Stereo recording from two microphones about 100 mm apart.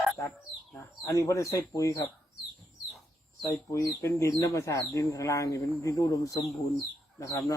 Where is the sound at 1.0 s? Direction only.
35° left (ahead or behind).